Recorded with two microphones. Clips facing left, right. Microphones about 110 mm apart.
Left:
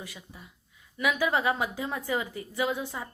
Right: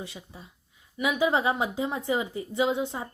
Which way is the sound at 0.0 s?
25° right (ahead or behind).